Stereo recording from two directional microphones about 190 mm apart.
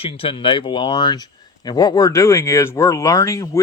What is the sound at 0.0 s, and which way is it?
Speech, 30° left (ahead or behind).